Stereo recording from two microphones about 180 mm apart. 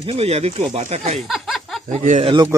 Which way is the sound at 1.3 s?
Centre (ahead or behind).